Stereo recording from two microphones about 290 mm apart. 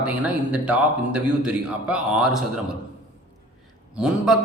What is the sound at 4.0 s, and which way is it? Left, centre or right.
Speech, centre.